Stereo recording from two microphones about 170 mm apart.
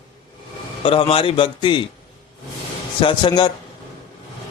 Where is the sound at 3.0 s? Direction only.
30° left (ahead or behind).